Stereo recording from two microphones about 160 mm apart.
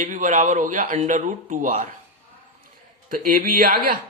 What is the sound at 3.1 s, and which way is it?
Speech, 60° right (ahead or behind).